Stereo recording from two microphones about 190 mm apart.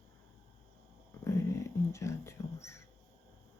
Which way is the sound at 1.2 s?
15° left (ahead or behind).